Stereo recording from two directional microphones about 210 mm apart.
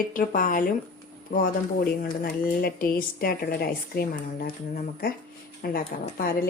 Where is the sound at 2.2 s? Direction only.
45° left (ahead or behind).